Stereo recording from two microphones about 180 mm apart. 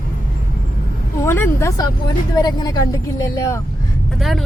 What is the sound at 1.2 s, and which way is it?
Speech, 15° left (ahead or behind).